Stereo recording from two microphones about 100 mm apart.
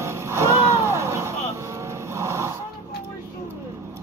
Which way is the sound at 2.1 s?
30° right (ahead or behind).